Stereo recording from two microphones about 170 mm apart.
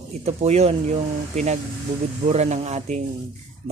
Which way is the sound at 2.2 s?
40° right (ahead or behind).